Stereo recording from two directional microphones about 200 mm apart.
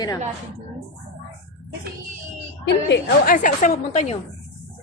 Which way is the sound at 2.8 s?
45° left (ahead or behind).